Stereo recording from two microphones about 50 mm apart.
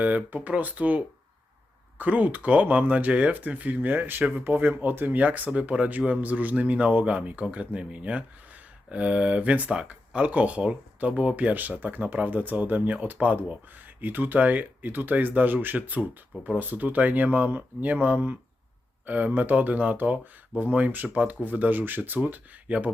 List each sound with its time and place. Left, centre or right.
0.0 s speech: right